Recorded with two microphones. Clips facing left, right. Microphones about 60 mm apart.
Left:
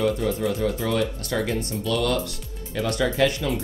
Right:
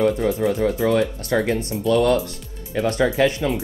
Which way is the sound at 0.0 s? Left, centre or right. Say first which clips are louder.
Right 4 dB; right.